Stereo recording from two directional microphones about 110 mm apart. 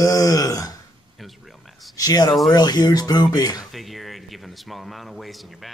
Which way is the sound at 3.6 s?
Centre (ahead or behind).